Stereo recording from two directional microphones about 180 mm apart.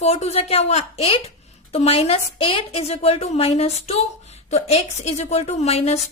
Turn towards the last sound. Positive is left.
turn(degrees=35)  # may be behind; listen again after turning